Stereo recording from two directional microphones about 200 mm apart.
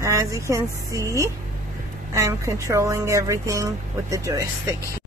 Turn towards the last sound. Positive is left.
turn(degrees=-15)  # may be behind; listen again after turning